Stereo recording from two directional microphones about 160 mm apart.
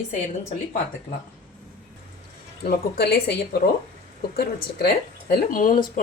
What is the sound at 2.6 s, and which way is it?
Speech, 75° left (ahead or behind).